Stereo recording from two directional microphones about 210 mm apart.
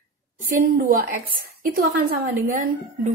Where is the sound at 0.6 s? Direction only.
45° right (ahead or behind).